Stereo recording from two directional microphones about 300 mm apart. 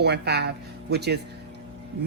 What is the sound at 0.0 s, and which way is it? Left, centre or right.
Speech, right.